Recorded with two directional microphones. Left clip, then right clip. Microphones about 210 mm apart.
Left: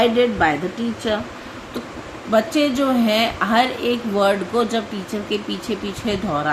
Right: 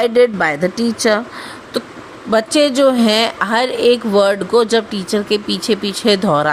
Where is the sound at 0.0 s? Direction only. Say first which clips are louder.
Right 4 dB; 55° right (ahead or behind).